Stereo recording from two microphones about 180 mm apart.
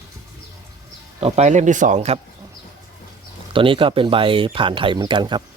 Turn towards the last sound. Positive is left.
turn(degrees=-25)  # may be behind; listen again after turning